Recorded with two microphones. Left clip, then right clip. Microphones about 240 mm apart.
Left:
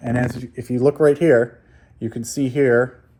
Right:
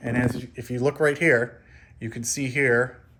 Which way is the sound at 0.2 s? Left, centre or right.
Left.